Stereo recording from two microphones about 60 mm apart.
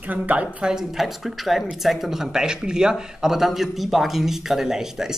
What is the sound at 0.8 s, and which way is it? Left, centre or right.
Speech, centre.